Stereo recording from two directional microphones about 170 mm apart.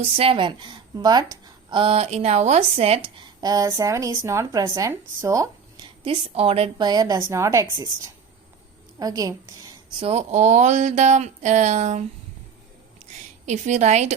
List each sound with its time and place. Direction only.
0.0 s speech: 35° right (ahead or behind)
3.4 s a woman's voice: 20° right (ahead or behind)
6.1 s a woman's voice: 35° right (ahead or behind)
9.0 s a woman's voice: 20° right (ahead or behind)
10.0 s speech: 40° right (ahead or behind)
13.4 s speech: 45° right (ahead or behind)